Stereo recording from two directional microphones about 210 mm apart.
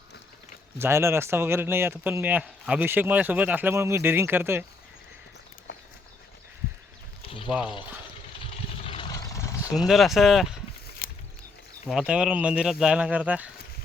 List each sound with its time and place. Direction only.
0.8 s speech: 10° right (ahead or behind)
7.3 s a sound: 25° left (ahead or behind)
9.7 s speech: centre (ahead or behind)
11.9 s speech: 5° right (ahead or behind)